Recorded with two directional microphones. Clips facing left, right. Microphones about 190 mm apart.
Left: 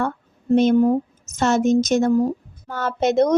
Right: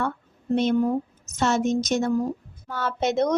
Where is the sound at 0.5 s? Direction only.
45° left (ahead or behind).